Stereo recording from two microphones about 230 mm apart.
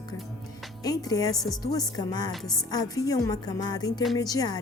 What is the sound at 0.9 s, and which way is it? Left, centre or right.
A woman's voice, centre.